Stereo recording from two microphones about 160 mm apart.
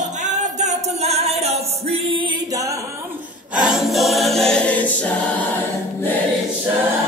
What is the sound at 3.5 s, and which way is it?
Choir, 5° right (ahead or behind).